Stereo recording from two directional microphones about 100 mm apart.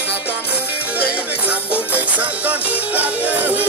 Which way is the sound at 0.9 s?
15° right (ahead or behind).